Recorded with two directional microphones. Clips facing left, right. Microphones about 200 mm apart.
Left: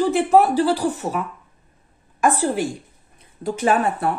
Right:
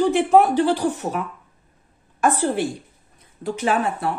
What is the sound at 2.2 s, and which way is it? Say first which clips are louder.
Speech: even; 10° left (ahead or behind).